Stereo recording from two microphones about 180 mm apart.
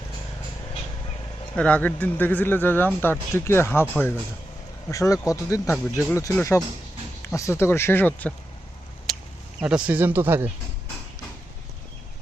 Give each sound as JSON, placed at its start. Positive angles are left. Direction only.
{"t": 1.5, "sound": "speech", "side_deg": 10}
{"t": 9.1, "sound": "a sound", "side_deg": 0}
{"t": 9.6, "sound": "speech", "side_deg": -5}